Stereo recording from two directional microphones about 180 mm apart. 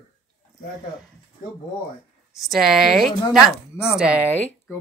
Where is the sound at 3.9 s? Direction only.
5° right (ahead or behind).